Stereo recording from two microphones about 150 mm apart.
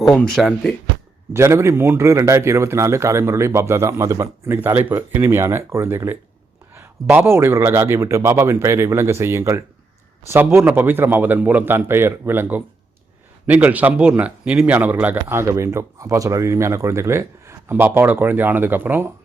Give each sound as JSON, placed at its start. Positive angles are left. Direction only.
{"t": 0.0, "sound": "speech", "side_deg": 5}
{"t": 1.3, "sound": "a man's voice", "side_deg": -20}